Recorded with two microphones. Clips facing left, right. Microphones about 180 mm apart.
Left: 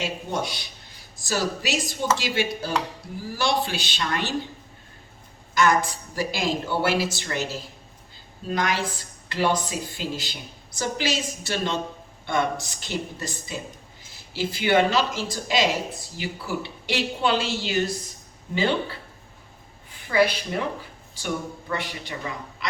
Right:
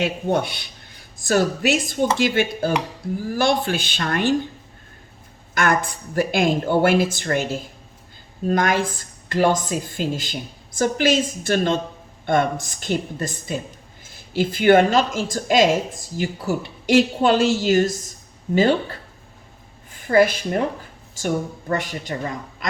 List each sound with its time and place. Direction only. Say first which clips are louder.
0.0 s speech: right 7 dB; 60° right (ahead or behind)
5.5 s a woman's voice: even; 55° right (ahead or behind)